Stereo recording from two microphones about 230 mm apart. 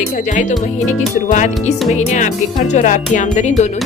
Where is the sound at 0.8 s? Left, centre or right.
Left.